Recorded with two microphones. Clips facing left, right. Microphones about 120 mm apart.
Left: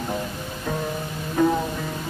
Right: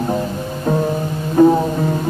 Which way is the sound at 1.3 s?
35° right (ahead or behind).